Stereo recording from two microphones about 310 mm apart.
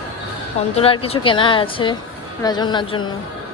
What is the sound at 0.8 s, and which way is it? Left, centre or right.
Speech, centre.